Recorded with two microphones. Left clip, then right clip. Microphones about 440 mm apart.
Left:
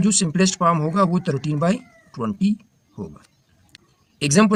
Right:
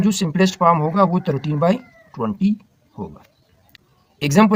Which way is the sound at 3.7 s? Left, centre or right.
Left.